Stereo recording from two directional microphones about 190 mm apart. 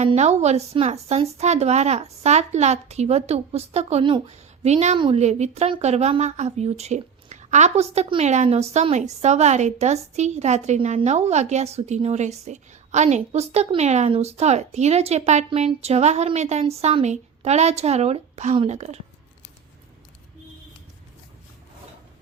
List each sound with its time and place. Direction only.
0.0 s a woman's voice: 35° right (ahead or behind)